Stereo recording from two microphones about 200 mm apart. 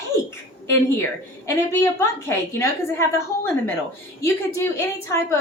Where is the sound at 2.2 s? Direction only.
10° left (ahead or behind).